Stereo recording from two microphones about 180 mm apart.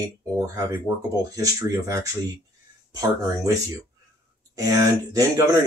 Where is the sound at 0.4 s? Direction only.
20° right (ahead or behind).